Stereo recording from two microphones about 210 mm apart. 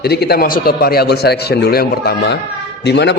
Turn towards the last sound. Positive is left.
turn(degrees=55)  # may be behind; listen again after turning